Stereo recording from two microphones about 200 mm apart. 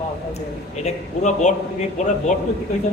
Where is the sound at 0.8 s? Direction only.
35° left (ahead or behind).